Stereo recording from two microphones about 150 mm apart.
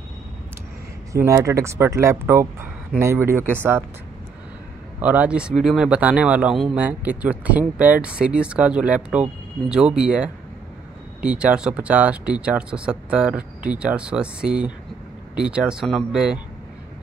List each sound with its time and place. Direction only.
1.1 s speech: 20° right (ahead or behind)
5.0 s speech: 10° right (ahead or behind)